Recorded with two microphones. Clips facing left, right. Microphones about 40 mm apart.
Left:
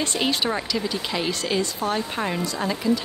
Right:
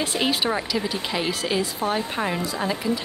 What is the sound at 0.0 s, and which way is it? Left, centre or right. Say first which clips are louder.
A woman's voice: even; centre.